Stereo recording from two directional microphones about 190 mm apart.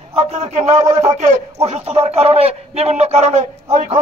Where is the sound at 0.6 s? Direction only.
15° right (ahead or behind).